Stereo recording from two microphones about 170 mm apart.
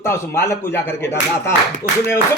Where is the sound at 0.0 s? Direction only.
15° left (ahead or behind).